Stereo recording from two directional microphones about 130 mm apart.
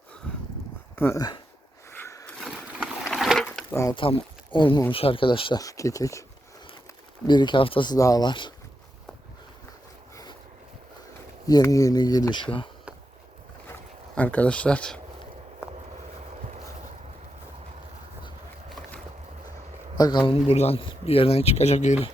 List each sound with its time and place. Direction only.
0.9 s speech: 15° left (ahead or behind)
1.9 s a sound: 20° left (ahead or behind)
2.4 s a sound: 5° right (ahead or behind)
3.1 s sewing machine: centre (ahead or behind)
3.7 s speech: 20° left (ahead or behind)
3.9 s speech: 40° left (ahead or behind)
5.5 s speech: 25° left (ahead or behind)
7.3 s speech: 35° left (ahead or behind)
7.9 s speech: 25° left (ahead or behind)
11.4 s speech: 25° left (ahead or behind)
14.2 s speech: 10° left (ahead or behind)
16.4 s boat: 60° right (ahead or behind)
20.0 s speech: 35° left (ahead or behind); by 21.9 s 60° left (ahead or behind)